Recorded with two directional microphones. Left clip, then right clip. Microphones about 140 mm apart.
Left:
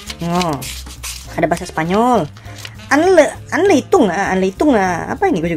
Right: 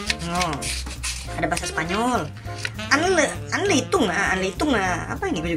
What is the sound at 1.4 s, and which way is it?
Speech, 40° left (ahead or behind).